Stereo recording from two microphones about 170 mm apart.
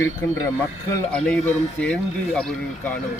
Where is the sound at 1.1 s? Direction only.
5° left (ahead or behind).